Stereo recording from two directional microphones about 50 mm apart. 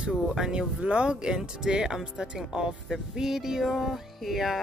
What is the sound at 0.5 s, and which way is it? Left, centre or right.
Speech, right.